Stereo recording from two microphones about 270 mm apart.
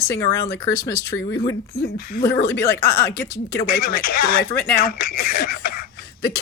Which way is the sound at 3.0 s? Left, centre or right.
Left.